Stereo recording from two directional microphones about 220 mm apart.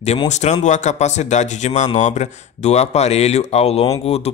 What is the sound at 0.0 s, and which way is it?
A man's voice, 30° left (ahead or behind).